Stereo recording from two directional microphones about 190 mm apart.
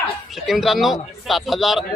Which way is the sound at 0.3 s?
Centre (ahead or behind).